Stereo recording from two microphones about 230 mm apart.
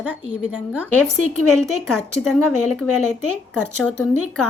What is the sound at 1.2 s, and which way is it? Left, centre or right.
Speech, right.